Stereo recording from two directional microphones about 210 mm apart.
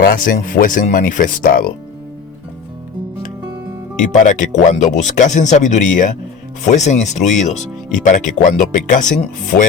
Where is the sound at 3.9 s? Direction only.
35° left (ahead or behind).